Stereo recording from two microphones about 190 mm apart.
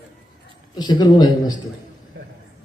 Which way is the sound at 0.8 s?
20° left (ahead or behind).